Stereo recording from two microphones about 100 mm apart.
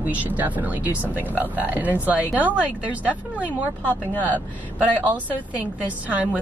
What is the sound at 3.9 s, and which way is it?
Speech, 15° left (ahead or behind).